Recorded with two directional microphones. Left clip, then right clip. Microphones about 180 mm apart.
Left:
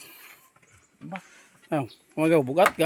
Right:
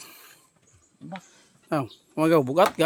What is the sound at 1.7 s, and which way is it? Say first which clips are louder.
Speech: right 1 dB; 15° right (ahead or behind).